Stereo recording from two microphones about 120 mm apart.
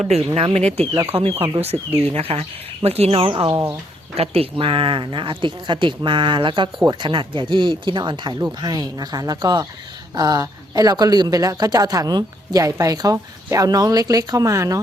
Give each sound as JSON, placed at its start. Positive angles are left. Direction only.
{"t": 0.0, "sound": "speech", "side_deg": -60}
{"t": 3.5, "sound": "speech", "side_deg": -25}
{"t": 4.1, "sound": "speech", "side_deg": -55}